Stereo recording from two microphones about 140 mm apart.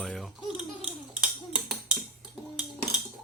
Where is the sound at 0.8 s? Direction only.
5° right (ahead or behind).